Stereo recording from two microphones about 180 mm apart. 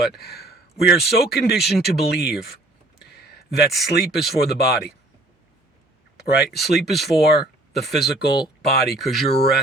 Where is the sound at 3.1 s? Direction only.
65° left (ahead or behind).